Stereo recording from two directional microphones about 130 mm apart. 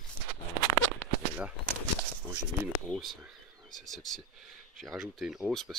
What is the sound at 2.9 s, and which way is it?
Speech, centre (ahead or behind).